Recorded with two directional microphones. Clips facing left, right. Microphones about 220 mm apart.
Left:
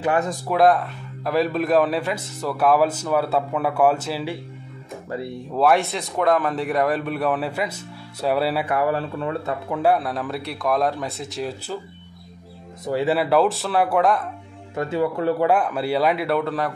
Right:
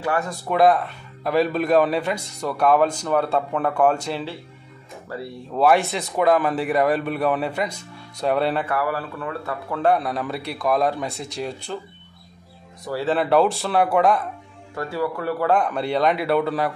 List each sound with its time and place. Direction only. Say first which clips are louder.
0.0 s speech: left 3 dB; 20° left (ahead or behind)
0.5 s speech: right 1 dB; centre (ahead or behind)
5.5 s speech: right 1 dB; centre (ahead or behind)
8.6 s speech: left 3 dB; 20° left (ahead or behind)
9.8 s speech: even; 5° left (ahead or behind)
12.8 s speech: left 3 dB; 20° left (ahead or behind)
13.1 s speech: right 2 dB; 5° left (ahead or behind)
14.8 s speech: left 3 dB; 20° left (ahead or behind)
15.4 s speech: right 3 dB; 5° left (ahead or behind)